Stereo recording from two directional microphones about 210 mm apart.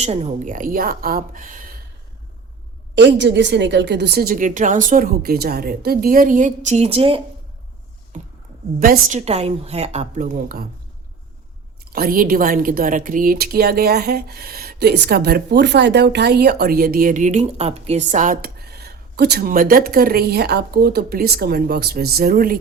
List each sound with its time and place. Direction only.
0.0 s a woman's voice: 30° right (ahead or behind)
2.9 s speech: 55° right (ahead or behind); by 7.2 s 25° right (ahead or behind)
8.1 s a sound: 35° right (ahead or behind)
8.8 s a woman's voice: 40° right (ahead or behind)
11.9 s speech: 45° right (ahead or behind)